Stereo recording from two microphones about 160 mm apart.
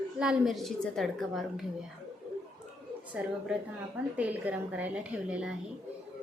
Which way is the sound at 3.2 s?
5° right (ahead or behind).